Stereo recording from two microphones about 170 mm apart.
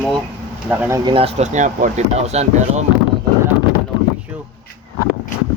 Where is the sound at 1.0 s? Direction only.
35° right (ahead or behind).